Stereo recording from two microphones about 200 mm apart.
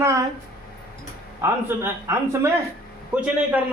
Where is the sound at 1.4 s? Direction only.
10° right (ahead or behind).